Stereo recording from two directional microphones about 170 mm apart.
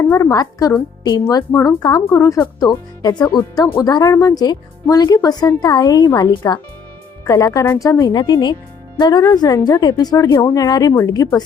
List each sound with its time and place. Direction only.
0.0 s speech: 15° left (ahead or behind)